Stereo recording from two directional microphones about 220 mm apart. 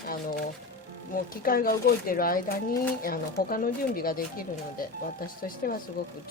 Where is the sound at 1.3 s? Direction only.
40° left (ahead or behind).